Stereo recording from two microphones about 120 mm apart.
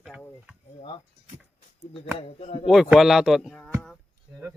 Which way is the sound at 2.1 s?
60° left (ahead or behind).